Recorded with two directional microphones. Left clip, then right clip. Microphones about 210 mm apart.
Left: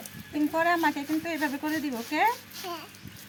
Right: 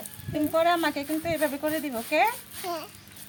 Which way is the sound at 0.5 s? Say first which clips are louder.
Right 2 dB; 20° right (ahead or behind).